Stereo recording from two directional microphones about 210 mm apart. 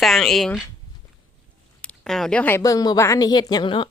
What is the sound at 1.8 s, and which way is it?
A woman's voice, 5° left (ahead or behind).